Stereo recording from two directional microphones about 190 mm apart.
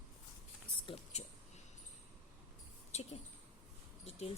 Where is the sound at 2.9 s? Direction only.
35° left (ahead or behind).